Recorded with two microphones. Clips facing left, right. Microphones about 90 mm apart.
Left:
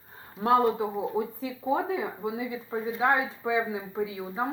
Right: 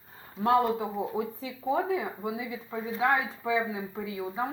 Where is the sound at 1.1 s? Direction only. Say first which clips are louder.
Left 2 dB; 25° left (ahead or behind).